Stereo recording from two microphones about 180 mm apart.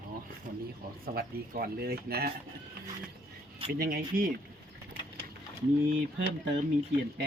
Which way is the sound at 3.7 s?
55° right (ahead or behind).